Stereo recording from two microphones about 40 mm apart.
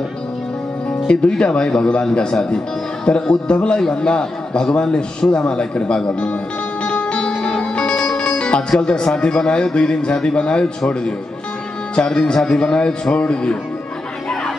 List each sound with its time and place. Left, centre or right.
1.0 s a man's voice: left
3.1 s a man's voice: left
6.8 s music: left
8.6 s a man's voice: left